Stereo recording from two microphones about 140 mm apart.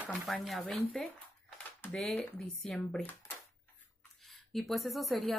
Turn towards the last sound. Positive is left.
turn(degrees=0)  # may be behind; listen again after turning